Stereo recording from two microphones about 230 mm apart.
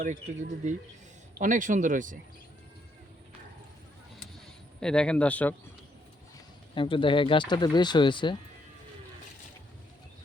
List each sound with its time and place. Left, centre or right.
0.0 s speech: right
4.8 s speech: centre
6.7 s speech: left